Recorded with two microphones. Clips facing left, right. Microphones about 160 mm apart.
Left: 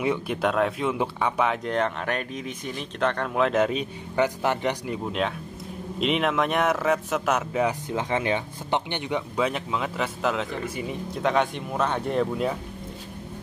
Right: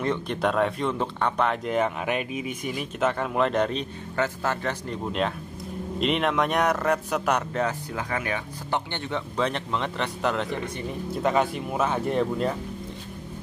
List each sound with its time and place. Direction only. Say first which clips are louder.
0.0 s speech: left 1 dB; 10° left (ahead or behind)
4.2 s speech: left 3 dB; 15° left (ahead or behind)
7.9 s speech: left 4 dB; 25° left (ahead or behind)
9.4 s speech: right 1 dB; 5° left (ahead or behind)